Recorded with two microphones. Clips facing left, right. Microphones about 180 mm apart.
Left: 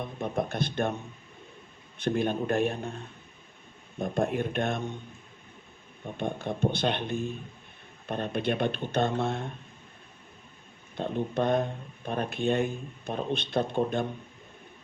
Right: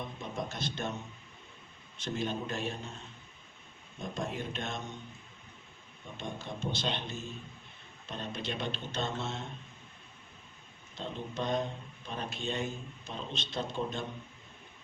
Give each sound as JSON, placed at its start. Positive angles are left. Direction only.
{"t": 0.0, "sound": "speech", "side_deg": 55}
{"t": 2.0, "sound": "speech", "side_deg": 55}
{"t": 6.1, "sound": "speech", "side_deg": 55}
{"t": 10.9, "sound": "speech", "side_deg": 55}